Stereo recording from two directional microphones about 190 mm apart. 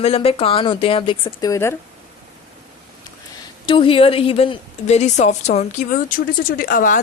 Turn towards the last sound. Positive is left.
turn(degrees=45)  # may be behind; listen again after turning